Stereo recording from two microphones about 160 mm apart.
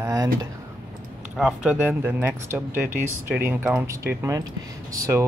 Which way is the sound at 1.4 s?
5° right (ahead or behind).